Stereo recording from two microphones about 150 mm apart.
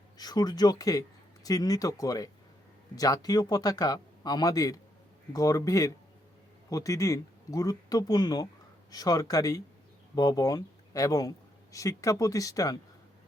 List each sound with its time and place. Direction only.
0.2 s speech: 25° left (ahead or behind)